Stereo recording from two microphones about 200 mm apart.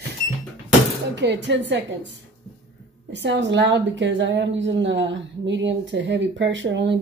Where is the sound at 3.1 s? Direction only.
65° right (ahead or behind).